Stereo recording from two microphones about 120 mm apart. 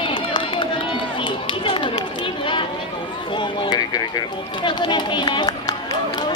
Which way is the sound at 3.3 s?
40° left (ahead or behind).